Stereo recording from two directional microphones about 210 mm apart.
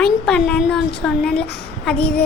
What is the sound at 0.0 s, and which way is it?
Speech, 5° left (ahead or behind).